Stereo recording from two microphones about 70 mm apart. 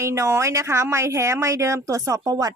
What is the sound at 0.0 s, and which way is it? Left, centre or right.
A woman's voice, right.